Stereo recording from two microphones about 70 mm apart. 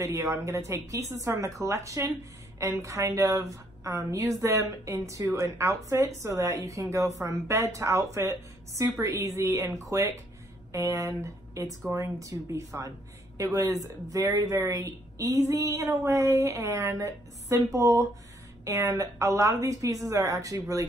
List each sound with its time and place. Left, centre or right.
0.0 s a woman's voice: right